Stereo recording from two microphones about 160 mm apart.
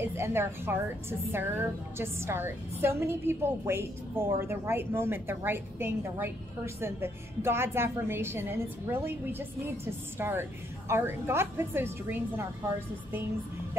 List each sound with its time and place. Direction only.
0.0 s a woman's voice: 15° right (ahead or behind)